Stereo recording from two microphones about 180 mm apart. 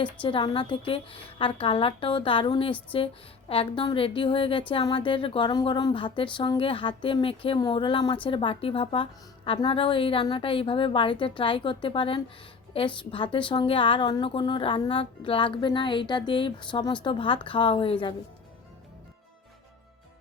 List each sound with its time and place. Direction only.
0.0 s a woman's voice: 30° left (ahead or behind)